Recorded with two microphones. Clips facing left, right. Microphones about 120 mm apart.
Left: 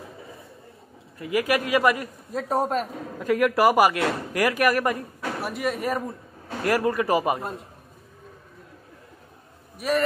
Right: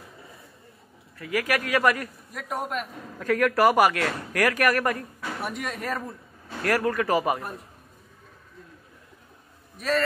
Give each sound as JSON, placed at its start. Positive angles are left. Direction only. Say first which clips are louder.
{"t": 1.1, "sound": "a man's voice", "louder": "left 3 dB", "side_deg": 20}
{"t": 2.3, "sound": "speech", "louder": "left 7 dB", "side_deg": 35}
{"t": 3.2, "sound": "a man's voice", "louder": "left 1 dB", "side_deg": 10}
{"t": 7.3, "sound": "a man's voice", "louder": "left 3 dB", "side_deg": 25}
{"t": 9.8, "sound": "a man's voice", "louder": "left 1 dB", "side_deg": 15}